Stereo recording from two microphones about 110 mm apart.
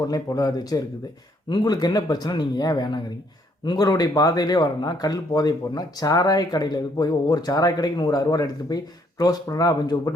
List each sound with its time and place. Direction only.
0.1 s speech: 35° left (ahead or behind)